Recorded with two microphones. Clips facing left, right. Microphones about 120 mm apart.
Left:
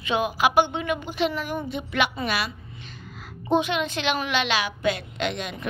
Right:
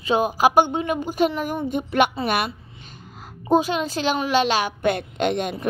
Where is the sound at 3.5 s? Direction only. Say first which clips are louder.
Right 3 dB; 35° right (ahead or behind).